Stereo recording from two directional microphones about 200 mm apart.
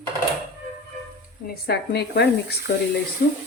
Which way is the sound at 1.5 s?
55° left (ahead or behind).